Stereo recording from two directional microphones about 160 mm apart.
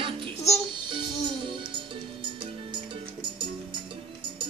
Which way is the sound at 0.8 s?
30° right (ahead or behind).